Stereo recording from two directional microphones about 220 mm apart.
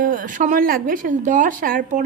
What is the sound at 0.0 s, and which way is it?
A woman's voice, 40° right (ahead or behind).